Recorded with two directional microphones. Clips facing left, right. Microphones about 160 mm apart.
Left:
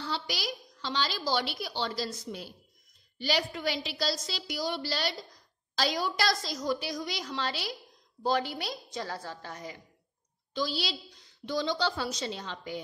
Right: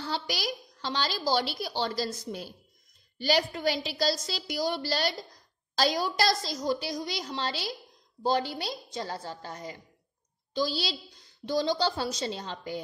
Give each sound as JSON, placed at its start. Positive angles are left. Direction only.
{"t": 0.0, "sound": "a woman's voice", "side_deg": -45}